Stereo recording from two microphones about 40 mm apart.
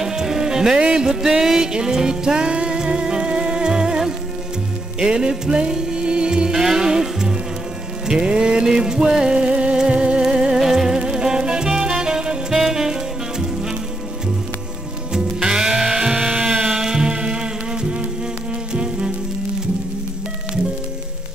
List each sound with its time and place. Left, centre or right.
0.0 s music: centre
12.5 s saxophone: centre
13.4 s music: centre
15.1 s music: centre